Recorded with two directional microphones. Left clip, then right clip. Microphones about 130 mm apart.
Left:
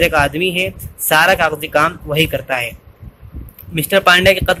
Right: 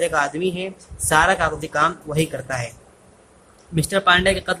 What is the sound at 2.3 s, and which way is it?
Speech, 25° left (ahead or behind).